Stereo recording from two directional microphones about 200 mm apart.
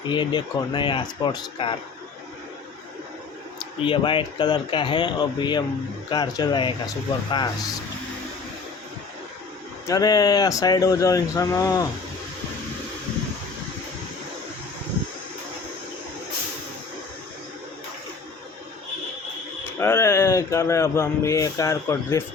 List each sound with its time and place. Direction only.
0.1 s speech: 25° left (ahead or behind)
3.8 s speech: 25° left (ahead or behind)
9.8 s speech: 20° left (ahead or behind)
19.8 s speech: 15° left (ahead or behind)